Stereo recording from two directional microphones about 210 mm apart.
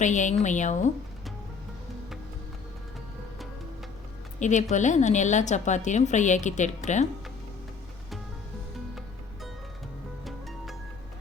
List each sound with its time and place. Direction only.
0.0 s a woman's voice: 35° left (ahead or behind)
4.4 s a woman's voice: 35° left (ahead or behind)
10.2 s music: centre (ahead or behind)